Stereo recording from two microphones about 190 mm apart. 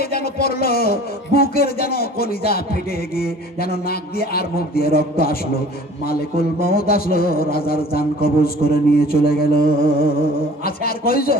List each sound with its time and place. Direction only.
0.0 s a man's voice: 55° left (ahead or behind)